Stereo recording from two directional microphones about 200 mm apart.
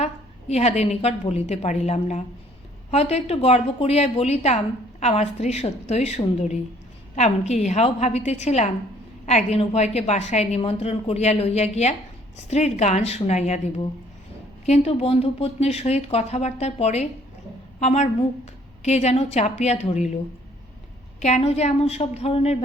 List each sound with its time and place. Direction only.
0.0 s a woman's voice: 30° left (ahead or behind)
21.2 s a woman's voice: 35° left (ahead or behind)